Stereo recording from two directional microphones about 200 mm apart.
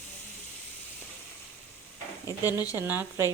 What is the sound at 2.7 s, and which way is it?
Stir, 10° right (ahead or behind).